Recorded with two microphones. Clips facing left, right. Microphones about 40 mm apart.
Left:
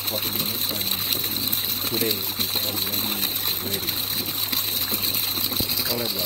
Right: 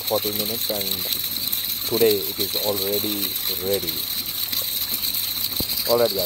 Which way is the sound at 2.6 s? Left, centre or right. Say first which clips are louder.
Right 5 dB; right.